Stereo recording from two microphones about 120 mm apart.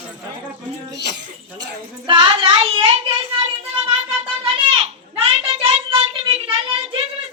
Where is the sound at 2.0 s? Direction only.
45° right (ahead or behind).